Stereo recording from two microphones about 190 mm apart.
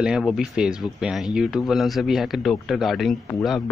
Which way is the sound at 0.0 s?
5° right (ahead or behind).